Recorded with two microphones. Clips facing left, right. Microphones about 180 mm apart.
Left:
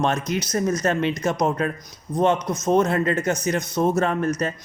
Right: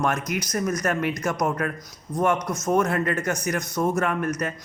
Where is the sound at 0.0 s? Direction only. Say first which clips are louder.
Left 2 dB; 25° left (ahead or behind).